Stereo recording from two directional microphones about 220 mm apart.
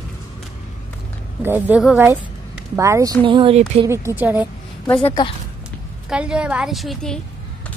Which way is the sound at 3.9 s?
10° right (ahead or behind).